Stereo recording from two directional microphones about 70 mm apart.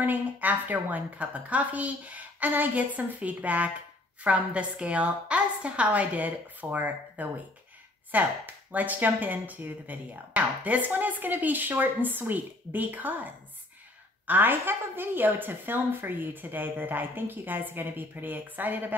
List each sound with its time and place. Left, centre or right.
0.0 s speech: right